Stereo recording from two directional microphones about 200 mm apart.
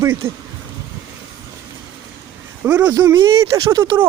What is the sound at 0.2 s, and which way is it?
Speech, 10° right (ahead or behind).